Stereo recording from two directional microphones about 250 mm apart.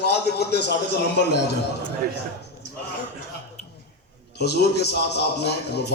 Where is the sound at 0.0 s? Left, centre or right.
Left.